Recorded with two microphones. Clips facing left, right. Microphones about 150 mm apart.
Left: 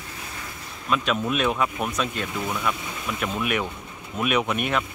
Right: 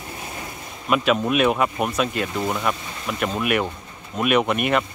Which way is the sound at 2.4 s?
25° right (ahead or behind).